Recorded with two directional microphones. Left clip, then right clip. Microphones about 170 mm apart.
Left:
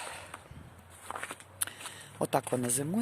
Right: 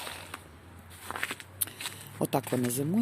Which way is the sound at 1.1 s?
10° right (ahead or behind).